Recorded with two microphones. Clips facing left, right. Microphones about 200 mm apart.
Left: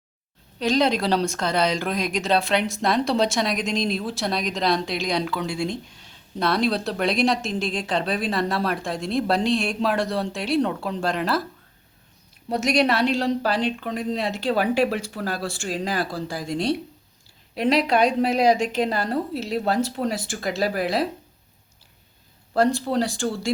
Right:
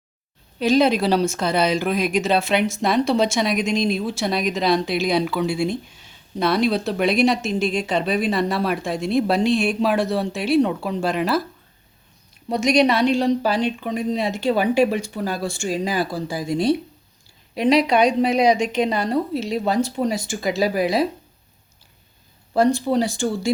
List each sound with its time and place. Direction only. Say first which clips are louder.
0.6 s speech: right 4 dB; 5° right (ahead or behind)
12.5 s speech: right 3 dB; 5° left (ahead or behind)
22.5 s speech: right 3 dB; centre (ahead or behind)